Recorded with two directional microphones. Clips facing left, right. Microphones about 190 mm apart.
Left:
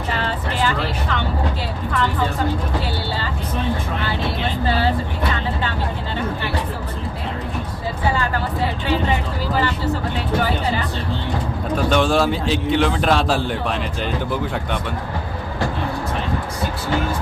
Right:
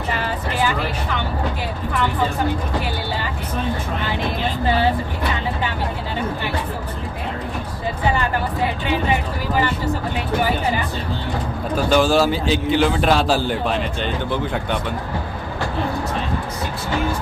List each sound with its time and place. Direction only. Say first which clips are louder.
0.2 s vehicle: even; 10° right (ahead or behind)
8.1 s a sound: right 1 dB; 15° right (ahead or behind)
10.2 s speech: right 2 dB; 15° right (ahead or behind)
11.7 s a man's voice: right 1 dB; centre (ahead or behind)